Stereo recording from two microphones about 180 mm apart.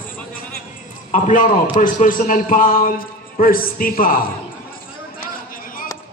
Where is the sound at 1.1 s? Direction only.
45° left (ahead or behind).